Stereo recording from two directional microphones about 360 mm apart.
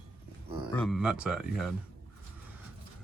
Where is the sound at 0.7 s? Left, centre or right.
Centre.